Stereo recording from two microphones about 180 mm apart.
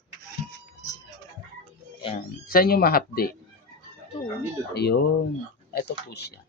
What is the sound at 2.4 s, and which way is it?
Speech, 55° left (ahead or behind).